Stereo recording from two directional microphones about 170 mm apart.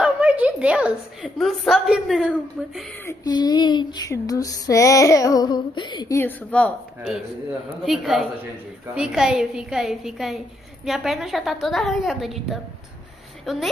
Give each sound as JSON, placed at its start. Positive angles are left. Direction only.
{"t": 0.0, "sound": "a woman's voice", "side_deg": -10}
{"t": 3.1, "sound": "female singing", "side_deg": 25}
{"t": 7.8, "sound": "a woman's voice", "side_deg": -5}